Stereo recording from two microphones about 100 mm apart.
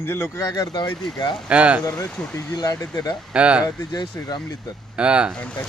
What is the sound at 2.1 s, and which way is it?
Speech, 10° left (ahead or behind).